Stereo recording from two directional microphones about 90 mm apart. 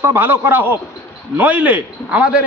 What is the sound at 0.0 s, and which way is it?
A man's voice, 25° right (ahead or behind).